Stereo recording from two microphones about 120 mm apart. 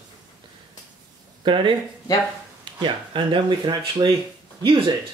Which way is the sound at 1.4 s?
40° right (ahead or behind).